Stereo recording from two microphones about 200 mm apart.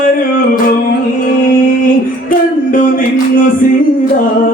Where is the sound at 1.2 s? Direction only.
45° left (ahead or behind).